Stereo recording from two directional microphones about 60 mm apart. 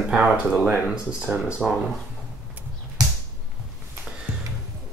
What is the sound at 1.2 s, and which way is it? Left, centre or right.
Speech, right.